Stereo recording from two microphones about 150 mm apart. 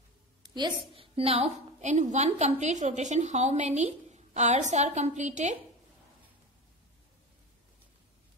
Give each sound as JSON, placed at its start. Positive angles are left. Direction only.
{"t": 0.4, "sound": "a woman's voice", "side_deg": -30}